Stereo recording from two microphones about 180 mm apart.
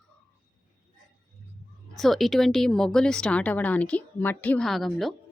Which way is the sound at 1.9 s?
Centre (ahead or behind).